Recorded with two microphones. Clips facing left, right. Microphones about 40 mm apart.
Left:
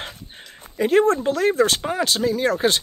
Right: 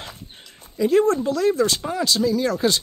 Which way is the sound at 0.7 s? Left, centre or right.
Left.